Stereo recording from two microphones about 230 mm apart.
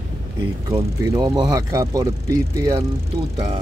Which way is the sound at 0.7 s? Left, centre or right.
Centre.